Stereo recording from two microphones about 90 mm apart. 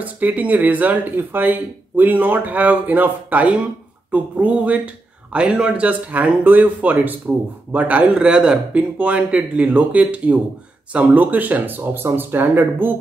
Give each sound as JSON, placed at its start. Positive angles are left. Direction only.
{"t": 0.0, "sound": "speech", "side_deg": -15}